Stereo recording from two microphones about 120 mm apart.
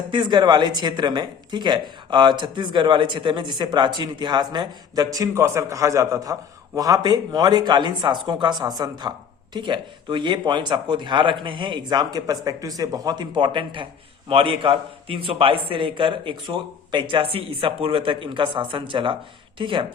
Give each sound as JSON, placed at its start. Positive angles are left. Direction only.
{"t": 0.1, "sound": "a man's voice", "side_deg": -40}